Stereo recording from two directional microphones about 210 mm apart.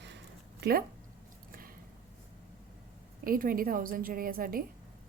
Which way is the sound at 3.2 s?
45° right (ahead or behind).